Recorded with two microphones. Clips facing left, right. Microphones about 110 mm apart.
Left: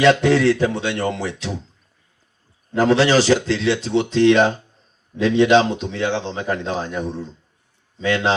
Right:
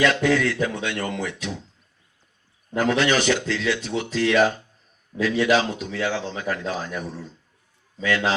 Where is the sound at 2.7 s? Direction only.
30° left (ahead or behind).